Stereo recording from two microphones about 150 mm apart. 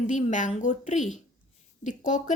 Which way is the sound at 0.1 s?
55° left (ahead or behind).